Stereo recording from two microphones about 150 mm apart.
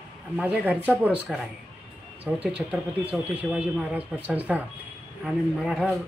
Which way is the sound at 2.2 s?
10° right (ahead or behind).